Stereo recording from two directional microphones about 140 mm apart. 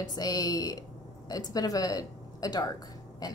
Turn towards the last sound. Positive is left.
turn(degrees=30)  # may be behind; listen again after turning